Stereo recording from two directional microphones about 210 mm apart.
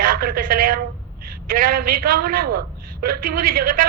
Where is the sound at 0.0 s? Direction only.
45° right (ahead or behind).